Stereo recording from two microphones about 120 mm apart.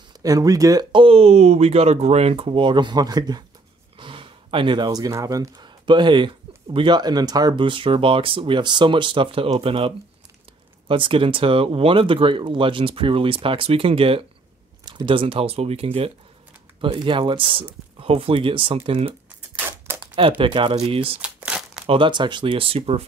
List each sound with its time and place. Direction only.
0.2 s speech: 30° right (ahead or behind)
0.9 s speech: 50° right (ahead or behind); by 3.4 s 35° right (ahead or behind)
4.0 s gasp: 45° right (ahead or behind)
5.1 s speech: 25° right (ahead or behind); by 16.1 s 55° right (ahead or behind)
16.8 s speech: 40° right (ahead or behind)
21.2 s crumpling: 10° right (ahead or behind)
21.8 s speech: 45° right (ahead or behind)